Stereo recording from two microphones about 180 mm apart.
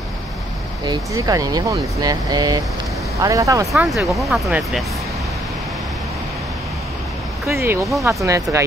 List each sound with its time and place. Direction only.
0.8 s speech: 20° right (ahead or behind)
3.7 s speech: centre (ahead or behind)
7.4 s speech: 15° right (ahead or behind)